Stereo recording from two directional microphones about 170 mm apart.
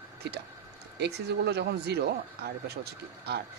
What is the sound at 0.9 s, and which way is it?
Speech, 80° right.